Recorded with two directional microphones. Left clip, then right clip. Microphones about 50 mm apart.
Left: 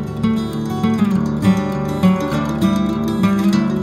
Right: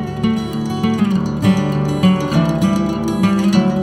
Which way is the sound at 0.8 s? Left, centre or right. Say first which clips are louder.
Even; right.